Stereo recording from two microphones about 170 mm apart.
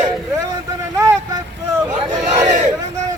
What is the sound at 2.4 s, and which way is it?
Crowd, 45° right (ahead or behind).